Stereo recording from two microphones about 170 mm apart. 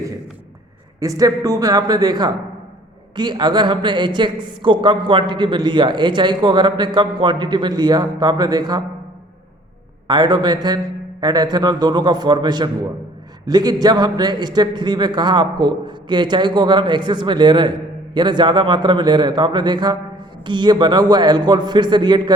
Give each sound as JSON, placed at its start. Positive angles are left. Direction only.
{"t": 0.9, "sound": "a man's voice", "side_deg": -20}
{"t": 10.1, "sound": "a man's voice", "side_deg": -25}